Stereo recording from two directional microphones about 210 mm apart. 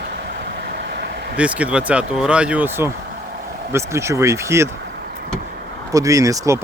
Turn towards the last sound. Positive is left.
turn(degrees=-15)  # may be behind; listen again after turning